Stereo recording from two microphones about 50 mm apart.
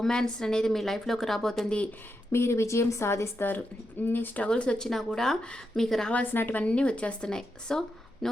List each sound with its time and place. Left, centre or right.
0.0 s a woman's voice: centre
2.3 s speech: left
4.0 s speech: left
4.4 s a woman's voice: left
4.9 s a woman's voice: centre
6.3 s speech: left
6.6 s a woman's voice: left